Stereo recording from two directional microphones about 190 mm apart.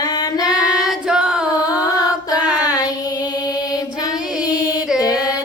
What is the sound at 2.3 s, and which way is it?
Child singing, 20° left (ahead or behind).